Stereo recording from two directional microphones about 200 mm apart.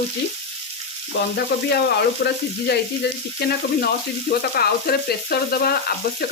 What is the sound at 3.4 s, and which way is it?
Frying, 50° left (ahead or behind).